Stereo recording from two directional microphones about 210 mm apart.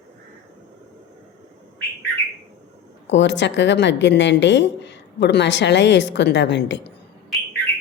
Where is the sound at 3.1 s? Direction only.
60° left (ahead or behind).